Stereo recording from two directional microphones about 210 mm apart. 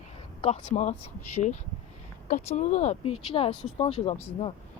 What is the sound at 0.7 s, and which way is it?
Speech, 30° left (ahead or behind).